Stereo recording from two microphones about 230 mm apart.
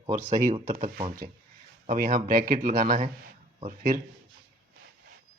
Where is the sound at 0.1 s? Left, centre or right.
Right.